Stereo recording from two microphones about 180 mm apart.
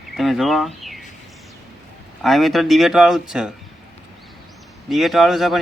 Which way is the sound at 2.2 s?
Centre (ahead or behind).